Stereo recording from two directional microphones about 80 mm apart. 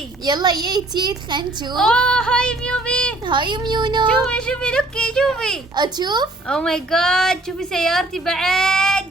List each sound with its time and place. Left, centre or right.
0.3 s a woman's voice: right
1.7 s a woman's voice: centre
3.2 s a child's voice: right
4.2 s a woman's voice: centre
5.7 s a woman's voice: right
6.5 s a woman's voice: centre